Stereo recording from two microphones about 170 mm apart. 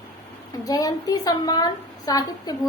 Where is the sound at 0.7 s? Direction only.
20° left (ahead or behind).